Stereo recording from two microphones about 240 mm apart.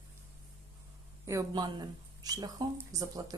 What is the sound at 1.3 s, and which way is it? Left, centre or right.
Speech, centre.